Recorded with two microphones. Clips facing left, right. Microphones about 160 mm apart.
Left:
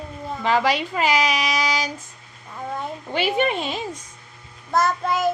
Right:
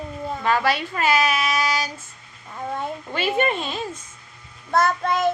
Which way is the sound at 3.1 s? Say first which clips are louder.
Left 1 dB; 15° left (ahead or behind).